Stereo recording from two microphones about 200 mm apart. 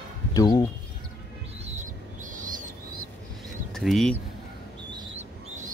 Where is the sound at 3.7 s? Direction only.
Centre (ahead or behind).